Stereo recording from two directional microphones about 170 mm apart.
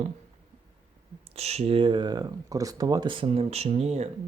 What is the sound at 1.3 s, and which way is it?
Speech, 40° right (ahead or behind).